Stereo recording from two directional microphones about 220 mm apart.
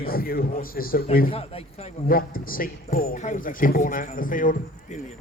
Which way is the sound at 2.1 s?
40° left (ahead or behind).